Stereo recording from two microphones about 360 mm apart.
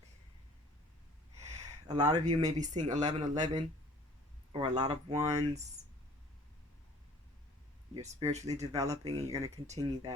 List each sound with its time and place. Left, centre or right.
1.4 s speech: centre
8.0 s speech: centre